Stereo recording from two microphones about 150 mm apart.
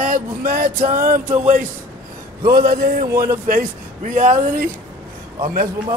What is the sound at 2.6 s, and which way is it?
Speech, 90° right.